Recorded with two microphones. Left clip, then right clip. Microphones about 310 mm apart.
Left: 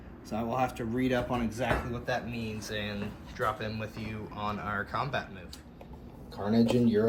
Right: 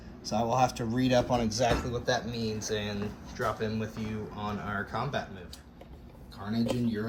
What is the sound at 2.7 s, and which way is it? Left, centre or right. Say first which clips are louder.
A man's voice: right 2 dB; centre.